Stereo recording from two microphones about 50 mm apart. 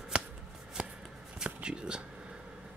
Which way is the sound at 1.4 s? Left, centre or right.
Centre.